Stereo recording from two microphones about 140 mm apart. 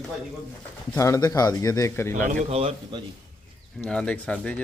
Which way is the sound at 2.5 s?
45° right (ahead or behind).